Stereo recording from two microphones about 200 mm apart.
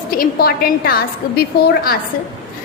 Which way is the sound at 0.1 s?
50° left (ahead or behind).